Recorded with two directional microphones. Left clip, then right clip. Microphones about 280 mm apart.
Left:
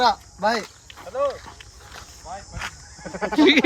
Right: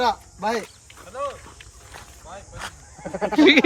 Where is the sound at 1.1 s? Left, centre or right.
Left.